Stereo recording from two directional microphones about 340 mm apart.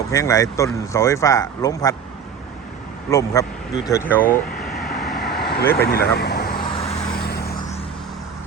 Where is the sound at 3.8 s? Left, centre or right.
Centre.